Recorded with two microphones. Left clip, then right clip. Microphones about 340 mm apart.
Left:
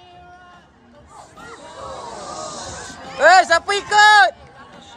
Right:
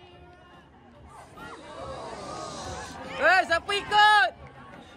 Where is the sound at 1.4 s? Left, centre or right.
Centre.